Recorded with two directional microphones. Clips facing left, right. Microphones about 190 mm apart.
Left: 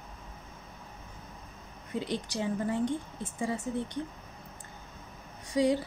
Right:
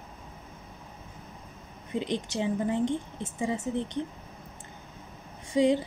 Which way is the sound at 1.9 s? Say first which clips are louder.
Right 3 dB; 20° right (ahead or behind).